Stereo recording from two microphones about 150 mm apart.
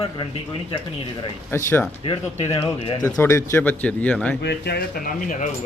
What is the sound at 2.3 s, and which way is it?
Speech, 45° left (ahead or behind).